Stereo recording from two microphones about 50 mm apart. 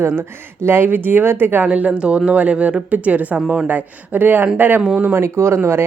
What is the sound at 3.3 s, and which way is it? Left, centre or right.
Speech, right.